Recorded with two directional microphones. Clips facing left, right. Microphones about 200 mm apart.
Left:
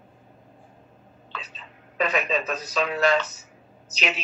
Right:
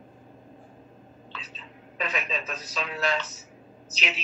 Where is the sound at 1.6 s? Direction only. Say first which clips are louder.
Left 7 dB; 70° left (ahead or behind).